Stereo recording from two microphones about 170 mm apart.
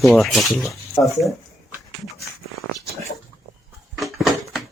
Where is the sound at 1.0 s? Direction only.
20° left (ahead or behind).